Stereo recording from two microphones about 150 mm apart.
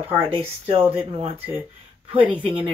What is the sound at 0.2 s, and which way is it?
Speech, 40° right (ahead or behind).